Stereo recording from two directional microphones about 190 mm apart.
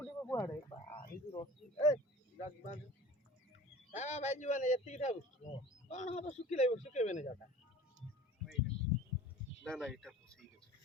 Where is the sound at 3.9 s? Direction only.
40° left (ahead or behind).